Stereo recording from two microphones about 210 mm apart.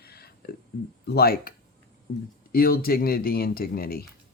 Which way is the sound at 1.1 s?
45° left (ahead or behind).